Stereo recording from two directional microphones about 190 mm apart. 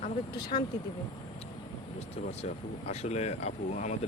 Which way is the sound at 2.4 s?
35° left (ahead or behind).